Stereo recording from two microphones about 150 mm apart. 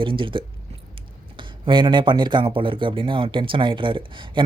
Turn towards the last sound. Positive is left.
turn(degrees=-35)  # may be behind; listen again after turning